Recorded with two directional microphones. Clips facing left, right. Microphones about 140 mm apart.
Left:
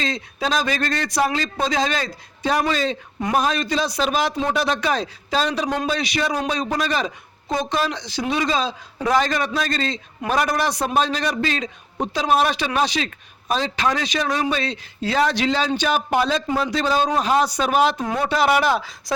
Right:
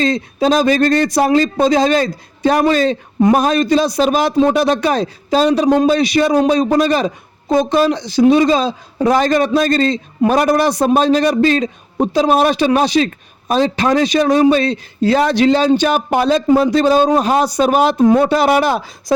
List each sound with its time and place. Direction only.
0.0 s a man's voice: 40° right (ahead or behind)
3.2 s a man's voice: 40° right (ahead or behind)
18.0 s speech: 35° right (ahead or behind)